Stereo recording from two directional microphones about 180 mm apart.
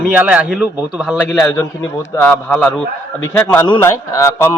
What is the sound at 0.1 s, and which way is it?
A man's voice, 10° right (ahead or behind).